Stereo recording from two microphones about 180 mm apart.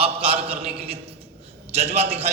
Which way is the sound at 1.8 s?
35° right (ahead or behind).